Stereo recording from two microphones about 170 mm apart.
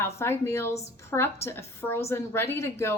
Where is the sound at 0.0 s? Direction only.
15° left (ahead or behind).